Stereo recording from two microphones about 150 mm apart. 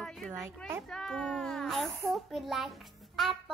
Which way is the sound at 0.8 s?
5° left (ahead or behind).